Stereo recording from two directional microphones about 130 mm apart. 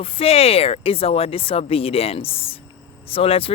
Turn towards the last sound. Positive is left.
turn(degrees=45)  # may be behind; listen again after turning